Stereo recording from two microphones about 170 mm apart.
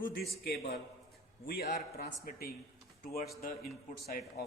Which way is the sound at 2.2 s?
65° left (ahead or behind).